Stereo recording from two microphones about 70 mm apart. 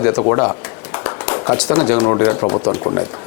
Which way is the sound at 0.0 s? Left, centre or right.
Left.